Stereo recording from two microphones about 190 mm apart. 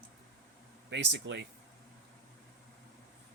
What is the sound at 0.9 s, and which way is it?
Speech, 65° right (ahead or behind).